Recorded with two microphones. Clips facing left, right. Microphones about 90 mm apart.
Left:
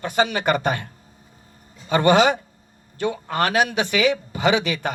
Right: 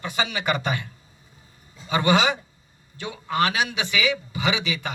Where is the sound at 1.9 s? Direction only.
50° left (ahead or behind).